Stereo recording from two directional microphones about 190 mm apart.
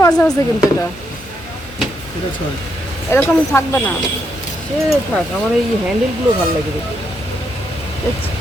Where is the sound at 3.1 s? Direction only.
10° left (ahead or behind).